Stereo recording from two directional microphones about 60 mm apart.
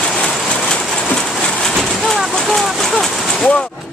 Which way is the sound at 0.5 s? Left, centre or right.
Centre.